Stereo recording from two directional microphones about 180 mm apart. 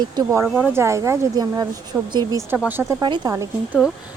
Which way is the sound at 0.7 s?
15° right (ahead or behind).